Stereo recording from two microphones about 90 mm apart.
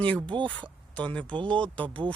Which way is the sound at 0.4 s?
10° left (ahead or behind).